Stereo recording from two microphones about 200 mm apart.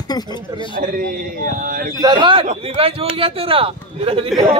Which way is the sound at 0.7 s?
45° right (ahead or behind).